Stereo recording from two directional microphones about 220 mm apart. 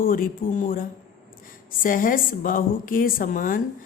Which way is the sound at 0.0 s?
40° left (ahead or behind).